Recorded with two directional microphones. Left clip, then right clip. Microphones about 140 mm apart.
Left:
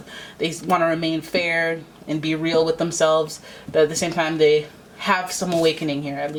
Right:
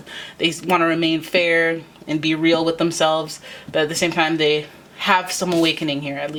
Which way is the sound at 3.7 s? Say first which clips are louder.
Left 1 dB; 30° right (ahead or behind).